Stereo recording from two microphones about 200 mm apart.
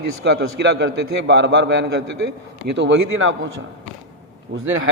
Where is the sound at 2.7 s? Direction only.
65° right (ahead or behind).